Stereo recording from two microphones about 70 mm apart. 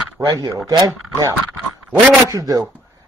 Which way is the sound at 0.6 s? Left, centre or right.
Right.